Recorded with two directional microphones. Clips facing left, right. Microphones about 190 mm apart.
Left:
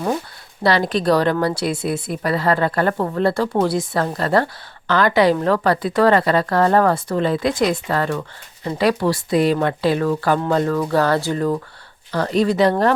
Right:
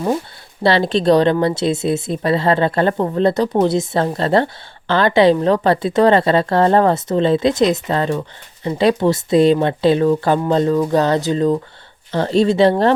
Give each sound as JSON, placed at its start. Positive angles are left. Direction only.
{"t": 0.6, "sound": "a woman's voice", "side_deg": -25}